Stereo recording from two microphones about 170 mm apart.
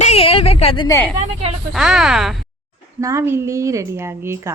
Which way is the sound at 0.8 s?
15° left (ahead or behind).